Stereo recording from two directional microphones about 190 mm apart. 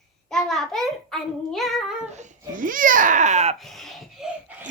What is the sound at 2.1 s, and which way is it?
Speech, 45° right (ahead or behind).